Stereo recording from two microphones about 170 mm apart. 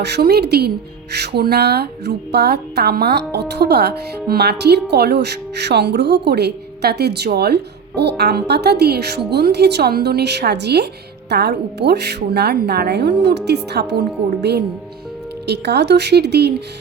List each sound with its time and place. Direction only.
0.0 s speech: 80° right
15.4 s speech: 80° right